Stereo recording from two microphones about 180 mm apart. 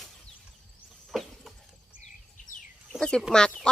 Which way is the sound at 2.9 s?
5° left (ahead or behind).